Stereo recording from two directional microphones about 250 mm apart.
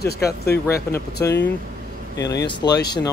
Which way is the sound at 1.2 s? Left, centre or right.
Centre.